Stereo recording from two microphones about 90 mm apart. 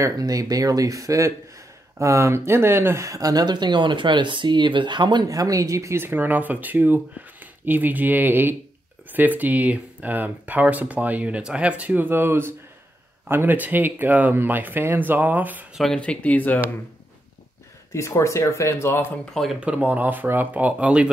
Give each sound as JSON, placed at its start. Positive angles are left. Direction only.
{"t": 0.0, "sound": "speech", "side_deg": -40}
{"t": 5.3, "sound": "speech", "side_deg": -40}
{"t": 15.9, "sound": "speech", "side_deg": 10}
{"t": 17.9, "sound": "speech", "side_deg": 35}
{"t": 19.3, "sound": "speech", "side_deg": 0}
{"t": 19.6, "sound": "speech", "side_deg": -15}